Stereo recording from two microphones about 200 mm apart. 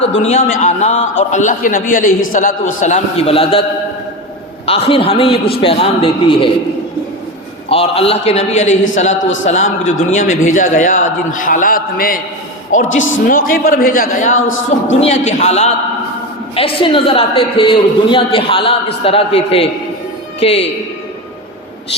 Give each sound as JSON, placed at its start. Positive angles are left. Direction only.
{"t": 0.2, "sound": "a man's voice", "side_deg": 35}
{"t": 4.6, "sound": "a woman's voice", "side_deg": 30}
{"t": 7.7, "sound": "a man's voice", "side_deg": 30}
{"t": 8.7, "sound": "a man's voice", "side_deg": 75}
{"t": 10.2, "sound": "a man's voice", "side_deg": 40}
{"t": 12.8, "sound": "speech", "side_deg": 75}
{"t": 13.2, "sound": "speech", "side_deg": 45}
{"t": 14.3, "sound": "a man's voice", "side_deg": 80}
{"t": 15.0, "sound": "a man's voice", "side_deg": 35}